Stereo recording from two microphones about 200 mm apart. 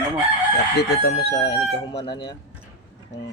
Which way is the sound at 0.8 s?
50° left (ahead or behind).